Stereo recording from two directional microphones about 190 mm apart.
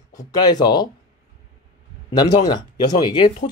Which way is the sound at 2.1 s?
20° left (ahead or behind).